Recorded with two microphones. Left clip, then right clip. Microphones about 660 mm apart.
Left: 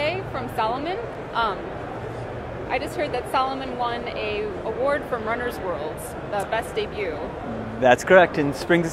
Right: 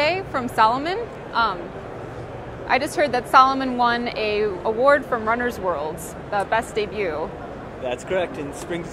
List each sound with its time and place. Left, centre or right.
0.0 s a woman's voice: right
2.7 s a woman's voice: right
7.8 s speech: left